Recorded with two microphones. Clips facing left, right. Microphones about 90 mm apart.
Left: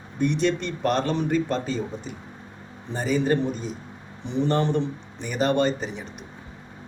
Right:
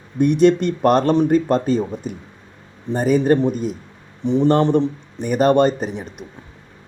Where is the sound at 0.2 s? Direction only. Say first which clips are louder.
Right 9 dB; 50° right (ahead or behind).